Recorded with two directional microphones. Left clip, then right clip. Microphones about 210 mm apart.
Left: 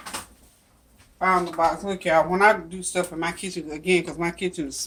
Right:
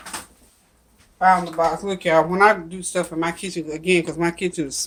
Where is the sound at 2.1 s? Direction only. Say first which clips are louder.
Right 3 dB; 40° right (ahead or behind).